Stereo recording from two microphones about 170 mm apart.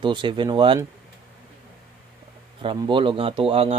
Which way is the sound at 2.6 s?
30° right (ahead or behind).